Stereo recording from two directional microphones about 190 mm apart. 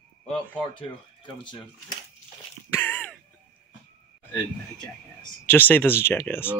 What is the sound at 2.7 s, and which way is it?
Throat clearing, 10° left (ahead or behind).